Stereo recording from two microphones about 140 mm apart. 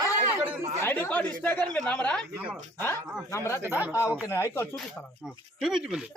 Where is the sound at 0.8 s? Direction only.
15° left (ahead or behind).